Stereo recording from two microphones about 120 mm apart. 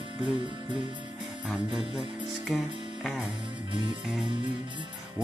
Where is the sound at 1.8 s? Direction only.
5° right (ahead or behind).